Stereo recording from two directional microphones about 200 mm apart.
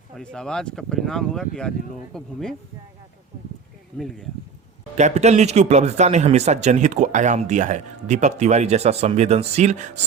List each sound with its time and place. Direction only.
0.2 s speech: 5° left (ahead or behind)
3.9 s speech: centre (ahead or behind)
4.9 s speech: 35° right (ahead or behind)